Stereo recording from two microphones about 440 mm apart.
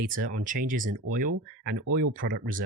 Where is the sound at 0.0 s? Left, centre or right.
Centre.